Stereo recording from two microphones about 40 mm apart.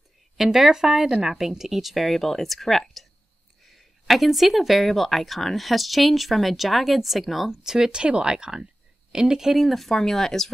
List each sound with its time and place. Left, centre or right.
0.4 s speech: centre
7.7 s speech: centre
9.6 s speech: centre